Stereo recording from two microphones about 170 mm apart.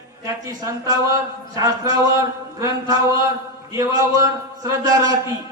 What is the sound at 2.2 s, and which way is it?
A man's voice, 20° right (ahead or behind).